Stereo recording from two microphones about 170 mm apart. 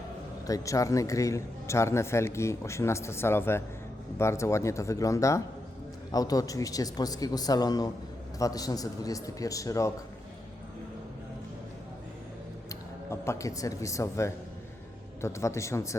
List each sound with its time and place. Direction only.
0.4 s a man's voice: 20° left (ahead or behind)
12.6 s a man's voice: 15° left (ahead or behind)